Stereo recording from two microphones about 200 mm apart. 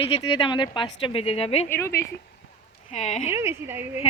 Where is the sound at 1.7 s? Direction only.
15° left (ahead or behind).